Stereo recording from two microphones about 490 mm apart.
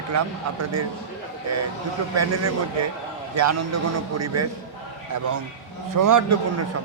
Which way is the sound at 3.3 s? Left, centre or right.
Right.